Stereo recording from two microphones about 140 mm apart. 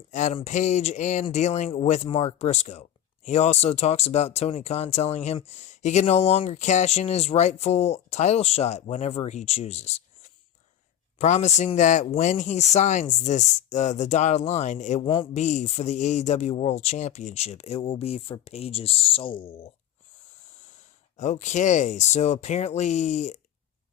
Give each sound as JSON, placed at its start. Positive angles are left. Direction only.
{"t": 0.1, "sound": "speech", "side_deg": 60}
{"t": 15.0, "sound": "a man's voice", "side_deg": 40}
{"t": 15.3, "sound": "speech", "side_deg": 55}
{"t": 21.2, "sound": "speech", "side_deg": 60}